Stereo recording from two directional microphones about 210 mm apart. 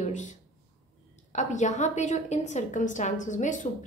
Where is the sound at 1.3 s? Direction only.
35° left (ahead or behind).